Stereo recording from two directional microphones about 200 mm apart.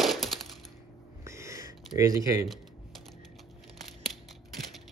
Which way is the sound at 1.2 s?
15° right (ahead or behind).